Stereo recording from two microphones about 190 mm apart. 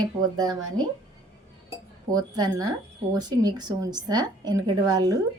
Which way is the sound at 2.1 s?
20° right (ahead or behind).